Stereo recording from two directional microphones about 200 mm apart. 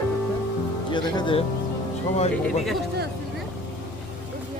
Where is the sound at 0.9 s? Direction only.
20° left (ahead or behind).